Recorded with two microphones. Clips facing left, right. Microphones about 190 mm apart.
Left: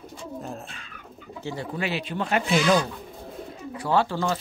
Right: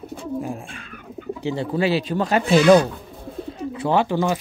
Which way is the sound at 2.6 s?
60° right (ahead or behind).